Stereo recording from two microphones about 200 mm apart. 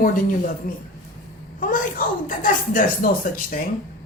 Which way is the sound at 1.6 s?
45° left (ahead or behind).